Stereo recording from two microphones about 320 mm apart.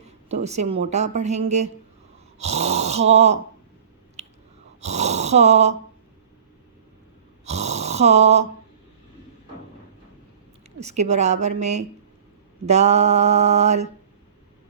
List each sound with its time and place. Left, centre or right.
0.0 s a woman's voice: right
2.4 s snoring: right
4.2 s chewing: right
4.8 s snoring: right
7.4 s snoring: right
10.8 s a sound: right